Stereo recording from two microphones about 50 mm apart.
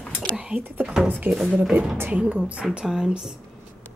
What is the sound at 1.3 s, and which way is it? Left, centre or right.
Speech, right.